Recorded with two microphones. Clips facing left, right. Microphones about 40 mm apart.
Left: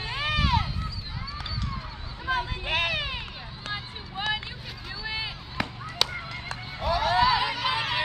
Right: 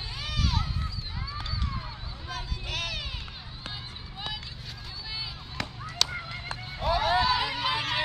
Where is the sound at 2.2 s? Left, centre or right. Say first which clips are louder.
Left 10 dB; left.